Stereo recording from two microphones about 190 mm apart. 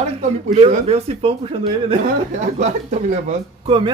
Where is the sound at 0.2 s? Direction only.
35° right (ahead or behind).